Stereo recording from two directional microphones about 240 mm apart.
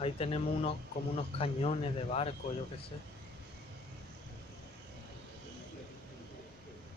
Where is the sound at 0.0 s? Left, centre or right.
Left.